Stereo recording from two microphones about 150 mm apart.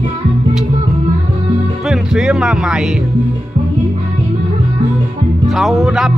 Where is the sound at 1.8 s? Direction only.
Centre (ahead or behind).